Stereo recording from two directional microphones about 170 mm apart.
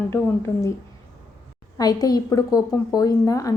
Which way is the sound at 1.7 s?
20° left (ahead or behind).